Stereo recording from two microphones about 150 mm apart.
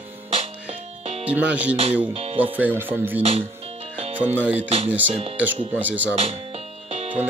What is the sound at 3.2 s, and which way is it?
Speech, 40° right (ahead or behind).